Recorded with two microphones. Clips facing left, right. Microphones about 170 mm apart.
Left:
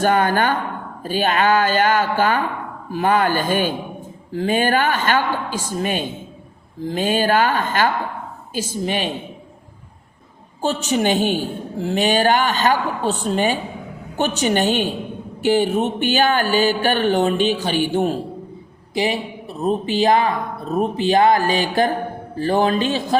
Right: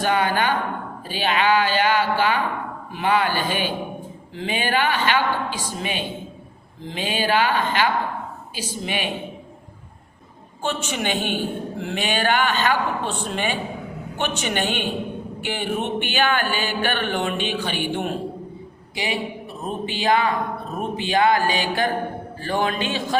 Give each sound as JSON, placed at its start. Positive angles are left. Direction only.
{"t": 0.0, "sound": "a woman's voice", "side_deg": 45}
{"t": 10.6, "sound": "a woman's voice", "side_deg": 35}